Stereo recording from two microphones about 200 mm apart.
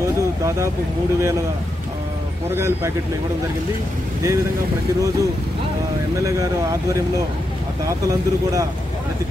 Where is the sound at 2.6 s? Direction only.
15° right (ahead or behind).